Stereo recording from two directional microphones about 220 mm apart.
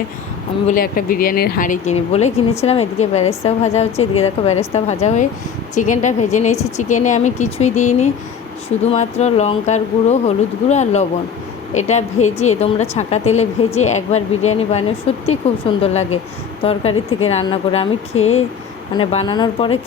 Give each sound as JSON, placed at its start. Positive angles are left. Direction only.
{"t": 0.7, "sound": "a woman's voice", "side_deg": 40}